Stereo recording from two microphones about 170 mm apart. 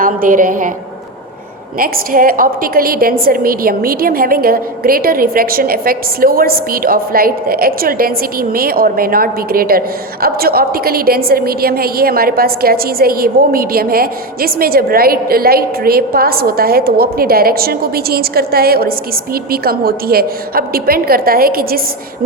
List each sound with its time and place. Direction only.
0.0 s a woman's voice: 55° right (ahead or behind)
1.8 s a woman's voice: 55° right (ahead or behind)